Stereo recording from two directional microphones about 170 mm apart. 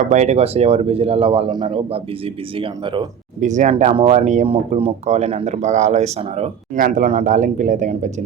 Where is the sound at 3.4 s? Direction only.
45° right (ahead or behind).